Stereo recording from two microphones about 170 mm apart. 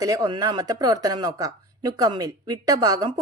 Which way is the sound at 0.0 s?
20° right (ahead or behind).